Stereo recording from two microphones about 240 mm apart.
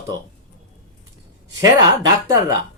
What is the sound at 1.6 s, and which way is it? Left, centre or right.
Speech, centre.